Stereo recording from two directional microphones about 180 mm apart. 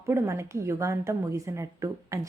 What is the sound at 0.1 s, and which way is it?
A woman's voice, 15° right (ahead or behind).